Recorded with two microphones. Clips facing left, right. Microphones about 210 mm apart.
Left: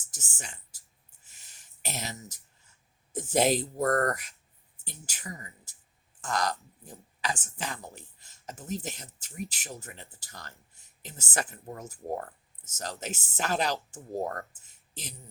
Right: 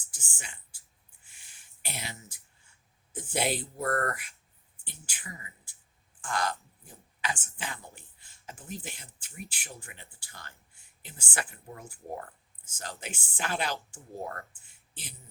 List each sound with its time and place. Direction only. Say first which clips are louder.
0.1 s speech: left 4 dB; 40° left (ahead or behind)
1.2 s a sound: left 1 dB; 40° left (ahead or behind)
3.1 s speech: left 6 dB; 40° left (ahead or behind)